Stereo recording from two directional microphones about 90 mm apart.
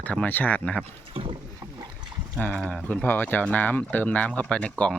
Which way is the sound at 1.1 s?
90° right.